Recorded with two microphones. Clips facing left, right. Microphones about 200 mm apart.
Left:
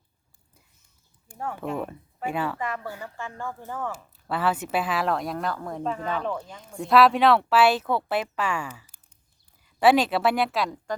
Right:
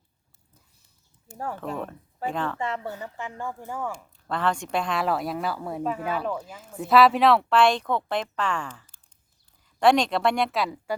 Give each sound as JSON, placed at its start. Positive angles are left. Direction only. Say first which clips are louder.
{"t": 1.7, "sound": "speech", "louder": "left 2 dB", "side_deg": 10}
{"t": 2.6, "sound": "speech", "louder": "right 1 dB", "side_deg": -25}
{"t": 3.9, "sound": "speech", "louder": "left 1 dB", "side_deg": 5}